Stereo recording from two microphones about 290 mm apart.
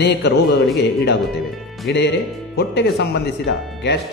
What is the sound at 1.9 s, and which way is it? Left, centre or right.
Speech, left.